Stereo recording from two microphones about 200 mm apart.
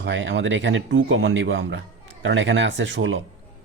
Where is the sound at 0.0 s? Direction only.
70° right (ahead or behind).